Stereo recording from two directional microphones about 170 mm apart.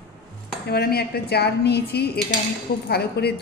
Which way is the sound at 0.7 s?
65° left (ahead or behind).